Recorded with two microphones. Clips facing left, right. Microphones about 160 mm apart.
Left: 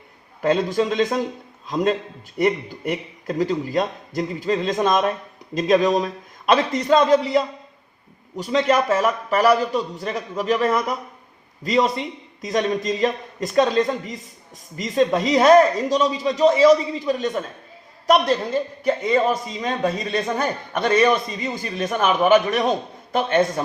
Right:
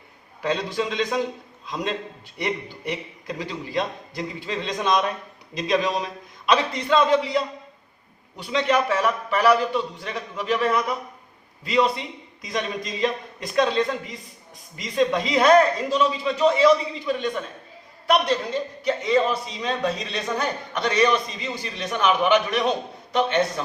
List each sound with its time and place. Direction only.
0.4 s a man's voice: 45° left (ahead or behind)